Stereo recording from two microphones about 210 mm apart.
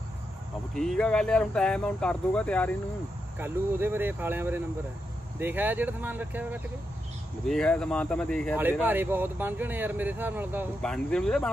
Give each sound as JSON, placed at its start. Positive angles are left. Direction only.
{"t": 0.7, "sound": "speech", "side_deg": 5}
{"t": 3.3, "sound": "speech", "side_deg": -10}
{"t": 7.4, "sound": "speech", "side_deg": 5}
{"t": 8.8, "sound": "speech", "side_deg": -10}
{"t": 10.8, "sound": "speech", "side_deg": 5}